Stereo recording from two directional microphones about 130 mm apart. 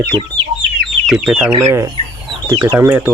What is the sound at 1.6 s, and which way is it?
Speech, 20° right (ahead or behind).